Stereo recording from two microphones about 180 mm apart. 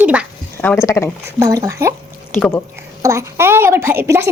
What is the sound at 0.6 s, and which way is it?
Speech, 15° left (ahead or behind).